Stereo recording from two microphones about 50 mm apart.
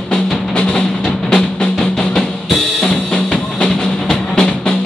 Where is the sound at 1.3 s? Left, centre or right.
Centre.